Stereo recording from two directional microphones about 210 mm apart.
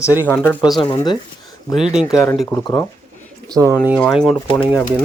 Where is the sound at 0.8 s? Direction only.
25° left (ahead or behind).